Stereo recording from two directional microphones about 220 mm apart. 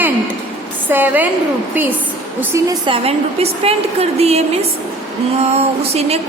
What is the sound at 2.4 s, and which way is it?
A woman's voice, 15° right (ahead or behind).